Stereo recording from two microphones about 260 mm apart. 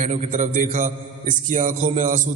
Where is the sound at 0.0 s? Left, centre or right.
Right.